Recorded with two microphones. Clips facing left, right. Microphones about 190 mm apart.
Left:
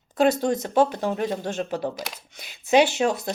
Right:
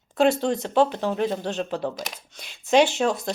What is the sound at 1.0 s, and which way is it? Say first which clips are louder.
Speech: right 1 dB; 15° left (ahead or behind).